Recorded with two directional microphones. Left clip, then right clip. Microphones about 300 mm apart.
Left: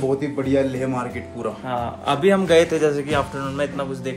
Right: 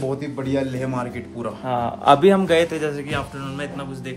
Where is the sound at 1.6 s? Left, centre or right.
Right.